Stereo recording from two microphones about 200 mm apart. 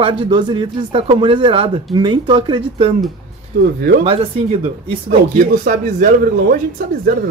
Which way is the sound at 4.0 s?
30° right (ahead or behind).